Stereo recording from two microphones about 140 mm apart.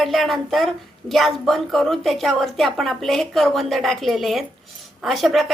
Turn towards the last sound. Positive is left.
turn(degrees=0)  # may be behind; listen again after turning